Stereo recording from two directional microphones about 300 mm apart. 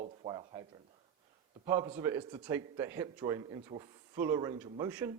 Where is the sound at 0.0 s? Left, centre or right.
Centre.